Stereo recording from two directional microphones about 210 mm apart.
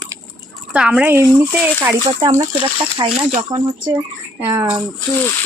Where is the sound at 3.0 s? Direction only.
20° right (ahead or behind).